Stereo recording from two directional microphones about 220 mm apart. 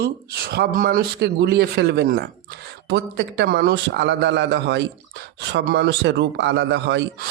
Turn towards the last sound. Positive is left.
turn(degrees=-50)  # may be behind; listen again after turning